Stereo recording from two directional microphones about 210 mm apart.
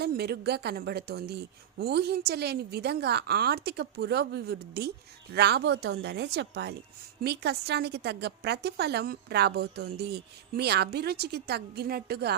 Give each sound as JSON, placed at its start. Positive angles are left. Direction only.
{"t": 0.0, "sound": "a woman's voice", "side_deg": -50}